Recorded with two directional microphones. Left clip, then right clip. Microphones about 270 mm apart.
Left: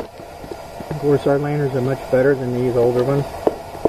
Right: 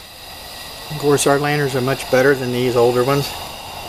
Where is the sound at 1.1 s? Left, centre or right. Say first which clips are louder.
Right 2 dB; centre.